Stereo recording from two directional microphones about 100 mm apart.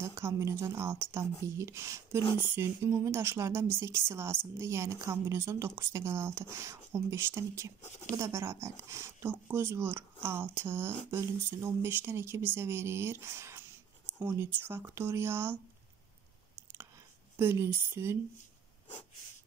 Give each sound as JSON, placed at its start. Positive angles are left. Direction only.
{"t": 0.0, "sound": "a woman's voice", "side_deg": -30}
{"t": 17.4, "sound": "a woman's voice", "side_deg": -20}